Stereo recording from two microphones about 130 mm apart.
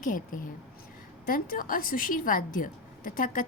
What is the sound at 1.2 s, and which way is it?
Speech, 90° left.